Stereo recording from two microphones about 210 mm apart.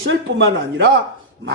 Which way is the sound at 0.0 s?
55° right (ahead or behind).